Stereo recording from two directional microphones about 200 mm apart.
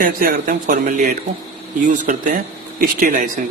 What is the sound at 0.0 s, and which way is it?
Speech, 45° right (ahead or behind).